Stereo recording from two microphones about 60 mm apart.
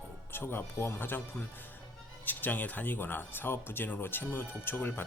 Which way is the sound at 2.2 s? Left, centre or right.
Left.